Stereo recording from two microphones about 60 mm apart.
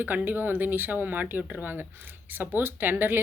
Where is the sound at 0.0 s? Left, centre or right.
Right.